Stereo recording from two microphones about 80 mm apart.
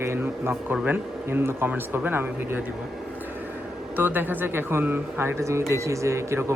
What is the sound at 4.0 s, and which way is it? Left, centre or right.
A man's voice, right.